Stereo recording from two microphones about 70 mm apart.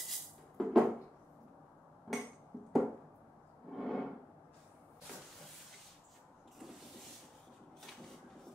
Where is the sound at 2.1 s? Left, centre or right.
Centre.